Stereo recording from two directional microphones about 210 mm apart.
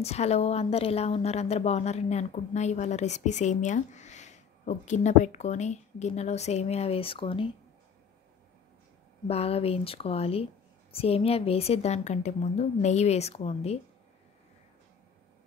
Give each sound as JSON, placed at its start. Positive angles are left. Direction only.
{"t": 0.0, "sound": "a woman's voice", "side_deg": 30}
{"t": 9.3, "sound": "a woman's voice", "side_deg": 30}